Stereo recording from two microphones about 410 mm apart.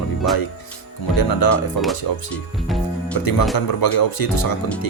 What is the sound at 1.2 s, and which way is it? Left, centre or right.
Speech, left.